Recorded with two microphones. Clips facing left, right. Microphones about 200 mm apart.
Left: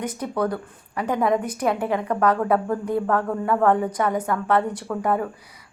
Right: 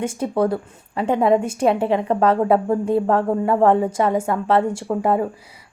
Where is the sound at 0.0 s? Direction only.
25° right (ahead or behind).